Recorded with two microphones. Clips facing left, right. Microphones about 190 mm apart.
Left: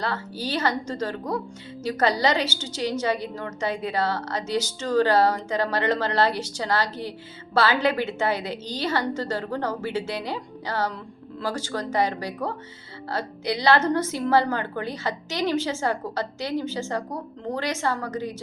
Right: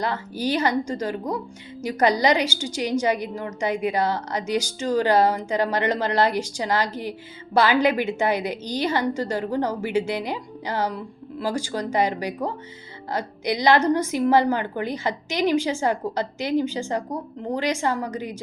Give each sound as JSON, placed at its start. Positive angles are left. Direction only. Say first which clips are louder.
{"t": 0.0, "sound": "a woman's voice", "louder": "right 4 dB", "side_deg": -15}